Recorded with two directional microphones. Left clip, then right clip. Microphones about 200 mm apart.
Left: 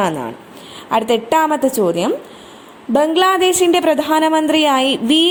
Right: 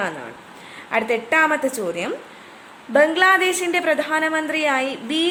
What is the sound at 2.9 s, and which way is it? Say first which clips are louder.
Speech: left 2 dB; 25° left (ahead or behind).